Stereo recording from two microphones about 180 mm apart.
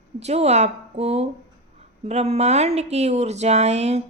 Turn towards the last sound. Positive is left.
turn(degrees=-35)  # may be behind; listen again after turning